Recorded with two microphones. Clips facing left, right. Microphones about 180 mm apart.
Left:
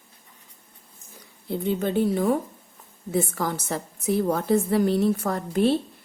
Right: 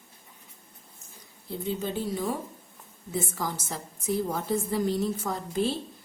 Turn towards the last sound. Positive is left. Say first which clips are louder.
# left 7 dB
turn(degrees=60)  # may be behind; listen again after turning